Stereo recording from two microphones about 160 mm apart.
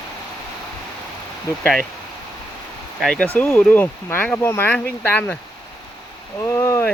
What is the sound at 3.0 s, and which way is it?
Speech, 5° left (ahead or behind).